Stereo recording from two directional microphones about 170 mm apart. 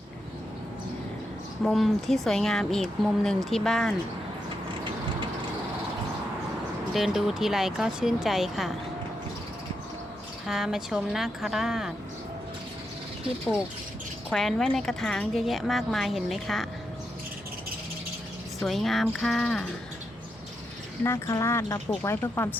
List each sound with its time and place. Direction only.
1.6 s a woman's voice: centre (ahead or behind)
6.9 s a woman's voice: centre (ahead or behind)
10.4 s a woman's voice: centre (ahead or behind)
14.3 s a woman's voice: centre (ahead or behind)
18.6 s a woman's voice: centre (ahead or behind)
21.0 s speech: 15° left (ahead or behind)